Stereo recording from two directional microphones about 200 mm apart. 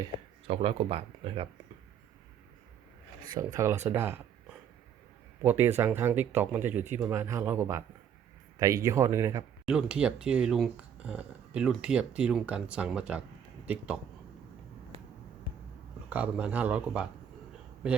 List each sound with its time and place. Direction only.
0.4 s speech: 30° right (ahead or behind)
3.3 s speech: 15° right (ahead or behind)
5.4 s speech: 10° right (ahead or behind)
9.6 s speech: 5° right (ahead or behind)
16.0 s speech: 5° right (ahead or behind)